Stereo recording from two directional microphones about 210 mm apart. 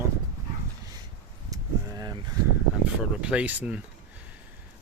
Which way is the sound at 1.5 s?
15° right (ahead or behind).